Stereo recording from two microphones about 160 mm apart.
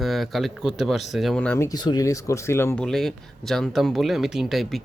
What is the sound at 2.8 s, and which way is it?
Speech, centre (ahead or behind).